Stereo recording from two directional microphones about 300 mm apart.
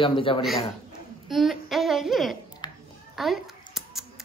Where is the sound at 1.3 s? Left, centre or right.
Centre.